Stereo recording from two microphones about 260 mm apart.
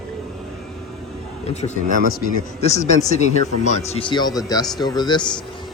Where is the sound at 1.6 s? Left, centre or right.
Left.